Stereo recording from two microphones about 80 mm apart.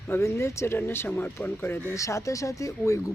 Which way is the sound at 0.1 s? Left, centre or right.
Left.